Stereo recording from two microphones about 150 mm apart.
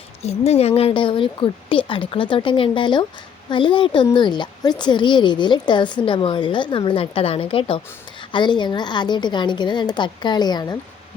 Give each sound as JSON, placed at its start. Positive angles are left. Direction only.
{"t": 0.2, "sound": "a woman's voice", "side_deg": 45}